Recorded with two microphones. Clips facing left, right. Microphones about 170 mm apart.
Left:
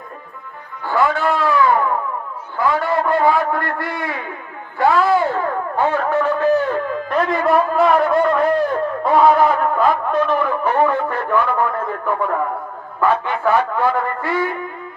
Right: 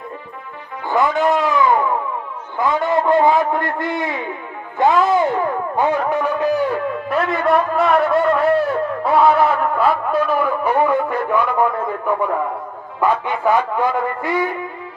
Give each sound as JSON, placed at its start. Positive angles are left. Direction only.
{"t": 0.8, "sound": "a sound", "side_deg": -20}
{"t": 4.7, "sound": "speech", "side_deg": -20}
{"t": 13.0, "sound": "a man's voice", "side_deg": -15}